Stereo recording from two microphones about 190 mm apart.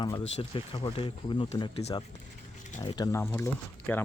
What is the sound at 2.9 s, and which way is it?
Speech, 20° left (ahead or behind).